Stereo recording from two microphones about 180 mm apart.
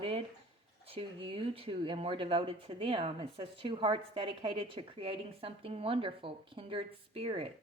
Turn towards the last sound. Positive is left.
turn(degrees=-30)  # may be behind; listen again after turning